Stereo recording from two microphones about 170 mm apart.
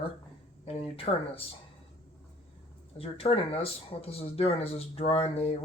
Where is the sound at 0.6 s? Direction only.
35° left (ahead or behind).